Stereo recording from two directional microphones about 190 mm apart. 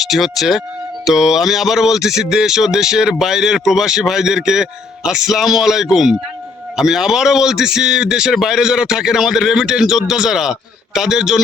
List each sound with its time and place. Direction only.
0.0 s speech: centre (ahead or behind)